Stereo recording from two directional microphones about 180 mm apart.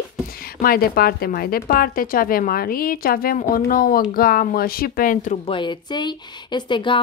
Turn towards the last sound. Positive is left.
turn(degrees=25)  # may be behind; listen again after turning